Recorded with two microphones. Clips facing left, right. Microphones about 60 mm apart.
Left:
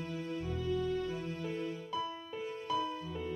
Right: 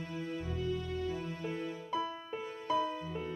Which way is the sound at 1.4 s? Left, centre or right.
Right.